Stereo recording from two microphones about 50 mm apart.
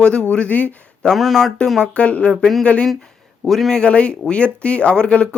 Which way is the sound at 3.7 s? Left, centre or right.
Left.